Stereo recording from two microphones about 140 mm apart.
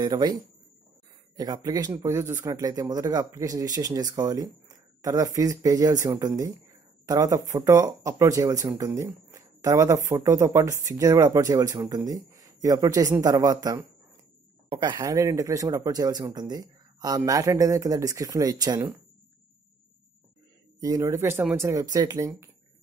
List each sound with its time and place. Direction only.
0.0 s speech: 30° right (ahead or behind)
20.8 s speech: 25° right (ahead or behind)